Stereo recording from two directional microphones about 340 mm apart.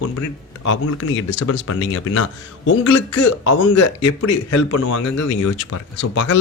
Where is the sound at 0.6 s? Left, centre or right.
Left.